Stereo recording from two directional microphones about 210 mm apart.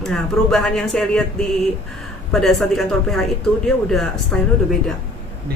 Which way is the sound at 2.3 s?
Centre (ahead or behind).